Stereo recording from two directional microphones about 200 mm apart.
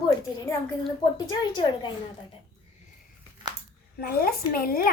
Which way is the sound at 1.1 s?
20° left (ahead or behind).